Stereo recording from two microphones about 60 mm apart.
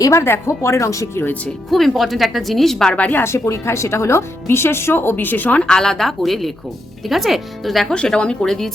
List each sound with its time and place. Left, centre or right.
0.0 s speech: left
1.7 s a woman's voice: centre
2.9 s speech: left
3.2 s speech: left
5.5 s a woman's voice: centre
7.9 s a woman's voice: centre